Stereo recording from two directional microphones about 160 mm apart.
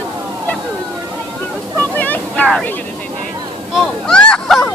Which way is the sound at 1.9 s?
10° left (ahead or behind).